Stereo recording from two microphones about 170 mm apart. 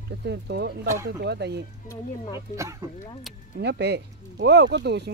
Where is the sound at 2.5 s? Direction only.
20° right (ahead or behind).